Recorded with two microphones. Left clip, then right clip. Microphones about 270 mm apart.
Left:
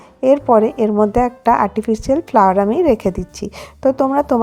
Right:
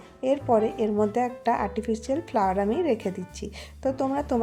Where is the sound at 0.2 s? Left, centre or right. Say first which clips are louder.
Left 11 dB; left.